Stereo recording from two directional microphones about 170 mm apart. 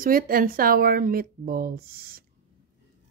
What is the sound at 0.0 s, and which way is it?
Speech, 55° right (ahead or behind).